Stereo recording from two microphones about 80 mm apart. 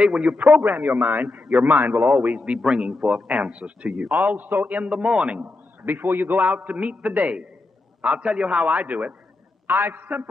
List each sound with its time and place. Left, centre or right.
0.0 s a man's voice: centre